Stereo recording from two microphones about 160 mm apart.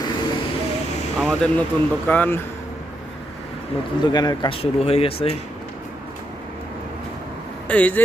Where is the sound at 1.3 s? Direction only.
5° left (ahead or behind).